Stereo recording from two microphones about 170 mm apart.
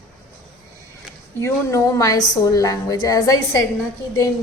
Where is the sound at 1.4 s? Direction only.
15° left (ahead or behind).